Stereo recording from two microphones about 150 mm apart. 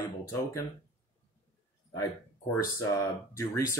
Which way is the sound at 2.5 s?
20° left (ahead or behind).